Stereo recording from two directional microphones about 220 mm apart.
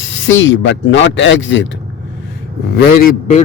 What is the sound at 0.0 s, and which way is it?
Speech, 60° left (ahead or behind).